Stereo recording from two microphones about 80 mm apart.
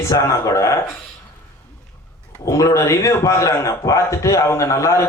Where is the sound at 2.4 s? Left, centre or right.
Left.